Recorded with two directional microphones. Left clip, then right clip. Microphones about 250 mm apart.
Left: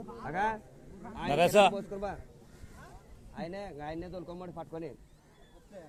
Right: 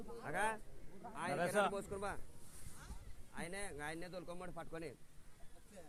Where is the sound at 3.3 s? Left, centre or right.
Right.